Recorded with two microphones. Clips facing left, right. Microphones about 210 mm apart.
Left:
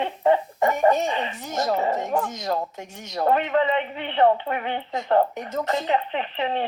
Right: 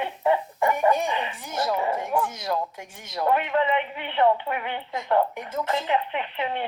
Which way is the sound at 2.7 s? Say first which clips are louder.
Left 4 dB; 10° right (ahead or behind).